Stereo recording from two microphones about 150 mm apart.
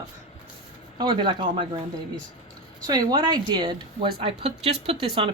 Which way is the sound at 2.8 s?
30° right (ahead or behind).